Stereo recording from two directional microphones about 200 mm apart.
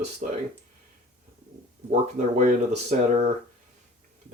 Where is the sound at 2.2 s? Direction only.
35° right (ahead or behind).